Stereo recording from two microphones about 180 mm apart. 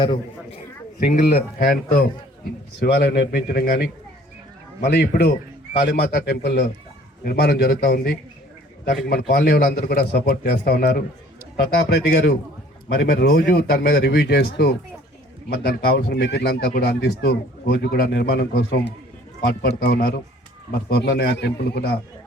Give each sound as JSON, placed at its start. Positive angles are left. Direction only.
{"t": 0.9, "sound": "speech", "side_deg": 55}
{"t": 2.8, "sound": "speech", "side_deg": 60}